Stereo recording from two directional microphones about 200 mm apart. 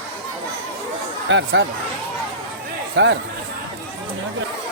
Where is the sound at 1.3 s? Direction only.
65° right (ahead or behind).